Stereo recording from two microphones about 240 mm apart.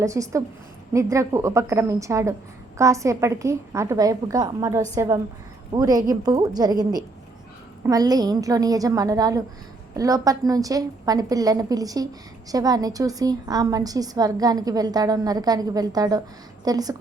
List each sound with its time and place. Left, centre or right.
0.0 s a woman's voice: centre